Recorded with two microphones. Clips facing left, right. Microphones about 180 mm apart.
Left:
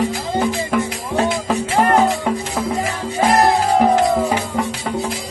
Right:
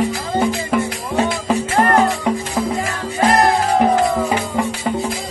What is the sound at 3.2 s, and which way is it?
Music, 5° left (ahead or behind).